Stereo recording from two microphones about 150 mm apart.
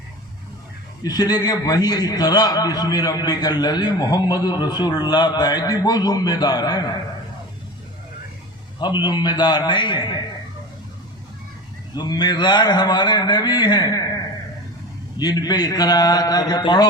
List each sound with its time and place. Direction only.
1.0 s a man's voice: 25° left (ahead or behind)
8.8 s a man's voice: 30° left (ahead or behind)
11.9 s a man's voice: 30° left (ahead or behind)
15.2 s a man's voice: 25° left (ahead or behind)